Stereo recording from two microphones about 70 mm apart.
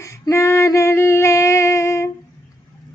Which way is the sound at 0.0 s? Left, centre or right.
Left.